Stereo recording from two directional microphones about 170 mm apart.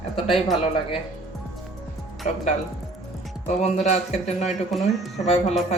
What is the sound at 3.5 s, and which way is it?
Speech, 40° left (ahead or behind).